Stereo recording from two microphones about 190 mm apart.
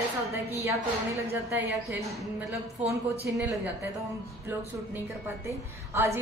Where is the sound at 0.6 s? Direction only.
15° right (ahead or behind).